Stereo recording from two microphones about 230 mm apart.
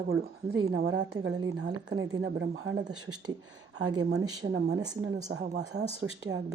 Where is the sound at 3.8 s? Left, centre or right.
Centre.